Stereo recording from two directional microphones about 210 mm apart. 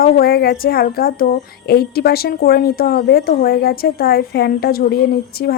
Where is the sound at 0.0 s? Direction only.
45° left (ahead or behind).